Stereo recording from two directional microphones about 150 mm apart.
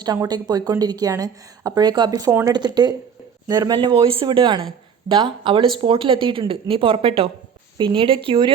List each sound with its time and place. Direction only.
0.0 s a woman's voice: 25° right (ahead or behind)